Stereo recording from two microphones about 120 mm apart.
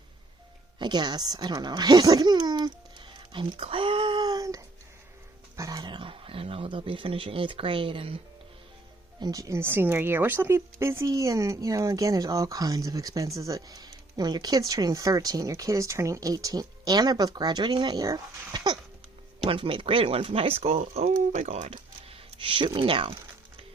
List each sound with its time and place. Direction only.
0.8 s speech: 40° right (ahead or behind)
3.3 s a sound: 50° right (ahead or behind); by 4.6 s 30° right (ahead or behind)
5.5 s speech: 30° right (ahead or behind); by 8.2 s 50° right (ahead or behind)
9.2 s speech: 30° right (ahead or behind)
19.5 s speech: 45° right (ahead or behind)